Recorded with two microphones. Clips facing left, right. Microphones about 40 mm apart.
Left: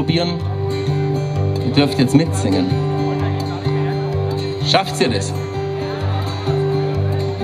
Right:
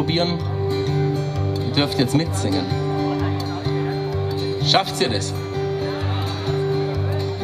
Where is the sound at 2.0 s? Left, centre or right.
Left.